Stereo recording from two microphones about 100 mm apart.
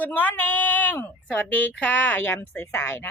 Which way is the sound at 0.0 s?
15° left (ahead or behind).